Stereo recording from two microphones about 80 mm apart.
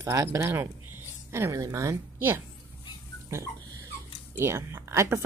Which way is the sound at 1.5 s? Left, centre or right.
Right.